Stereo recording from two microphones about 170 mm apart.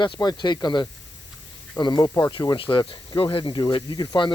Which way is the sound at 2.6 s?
30° left (ahead or behind).